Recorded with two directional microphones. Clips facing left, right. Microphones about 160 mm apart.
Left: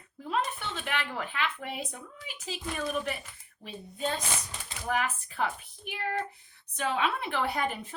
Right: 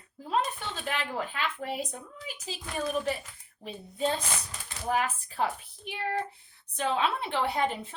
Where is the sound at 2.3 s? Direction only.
40° right (ahead or behind).